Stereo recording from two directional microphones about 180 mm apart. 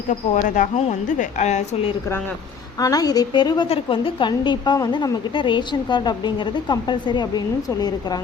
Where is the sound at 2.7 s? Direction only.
20° left (ahead or behind).